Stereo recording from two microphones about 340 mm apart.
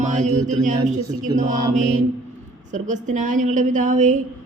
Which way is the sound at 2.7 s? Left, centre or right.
Right.